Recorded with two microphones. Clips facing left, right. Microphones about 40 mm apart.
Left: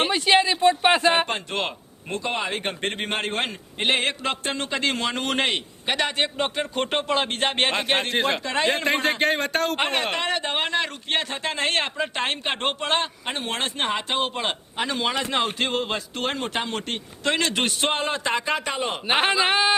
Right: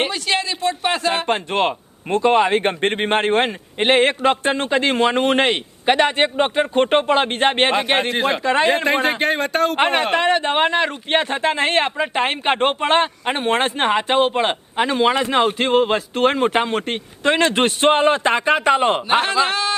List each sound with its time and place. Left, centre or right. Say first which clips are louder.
0.1 s speech: left 3 dB; centre
1.3 s speech: right 8 dB; right
7.7 s speech: right 5 dB; centre
9.7 s speech: right 7 dB; centre; by 19.0 s right
19.0 s speech: right 3 dB; centre